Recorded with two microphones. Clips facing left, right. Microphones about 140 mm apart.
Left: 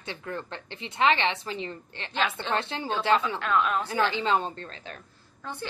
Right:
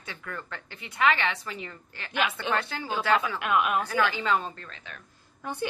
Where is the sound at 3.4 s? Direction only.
15° right (ahead or behind).